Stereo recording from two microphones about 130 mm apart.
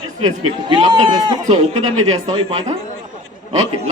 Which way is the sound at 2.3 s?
50° right (ahead or behind).